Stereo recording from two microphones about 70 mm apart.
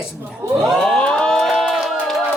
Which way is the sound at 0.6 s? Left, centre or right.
Centre.